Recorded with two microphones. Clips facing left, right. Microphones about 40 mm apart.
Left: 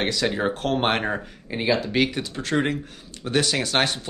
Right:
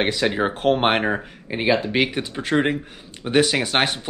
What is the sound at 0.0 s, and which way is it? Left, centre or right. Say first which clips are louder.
Speech: right 3 dB; right.